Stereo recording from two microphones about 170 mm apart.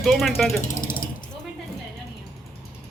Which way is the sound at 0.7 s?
55° left (ahead or behind).